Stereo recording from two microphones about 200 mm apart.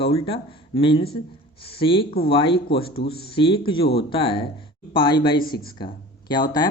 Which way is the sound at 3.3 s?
25° left (ahead or behind).